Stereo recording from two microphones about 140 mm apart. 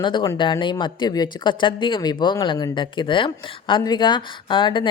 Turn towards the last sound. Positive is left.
turn(degrees=35)  # may be behind; listen again after turning